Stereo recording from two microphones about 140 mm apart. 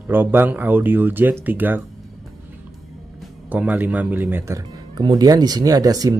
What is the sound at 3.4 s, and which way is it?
Speech, 10° right (ahead or behind).